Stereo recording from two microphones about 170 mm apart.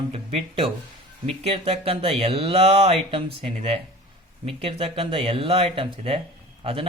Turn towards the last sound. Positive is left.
turn(degrees=-30)  # may be behind; listen again after turning